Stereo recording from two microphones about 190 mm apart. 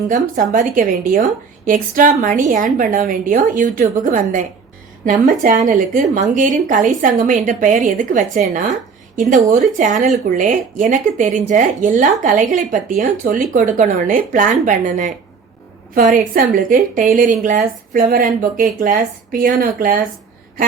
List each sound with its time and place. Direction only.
0.1 s a woman's voice: 40° right (ahead or behind)